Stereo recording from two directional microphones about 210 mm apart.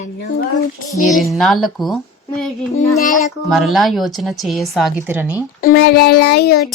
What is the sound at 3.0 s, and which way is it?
Speech, 40° left (ahead or behind).